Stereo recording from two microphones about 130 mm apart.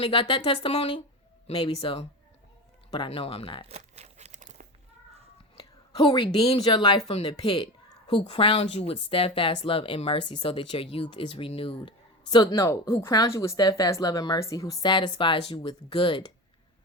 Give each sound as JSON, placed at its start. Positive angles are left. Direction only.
{"t": 0.0, "sound": "speech", "side_deg": 40}
{"t": 3.1, "sound": "speech", "side_deg": 50}
{"t": 3.7, "sound": "crumpling", "side_deg": -55}
{"t": 5.5, "sound": "a woman's voice", "side_deg": 40}
{"t": 7.1, "sound": "speech", "side_deg": 50}